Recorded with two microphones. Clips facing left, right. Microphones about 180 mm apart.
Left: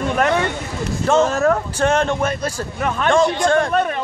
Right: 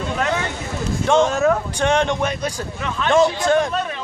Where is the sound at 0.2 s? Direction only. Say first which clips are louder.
Left 5 dB; 60° left (ahead or behind).